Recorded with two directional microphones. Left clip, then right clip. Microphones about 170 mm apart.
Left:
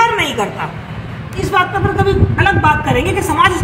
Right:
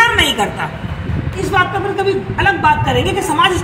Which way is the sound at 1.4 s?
5° left (ahead or behind).